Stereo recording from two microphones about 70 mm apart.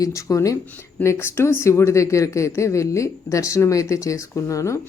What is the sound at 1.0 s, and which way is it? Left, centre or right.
Speech, left.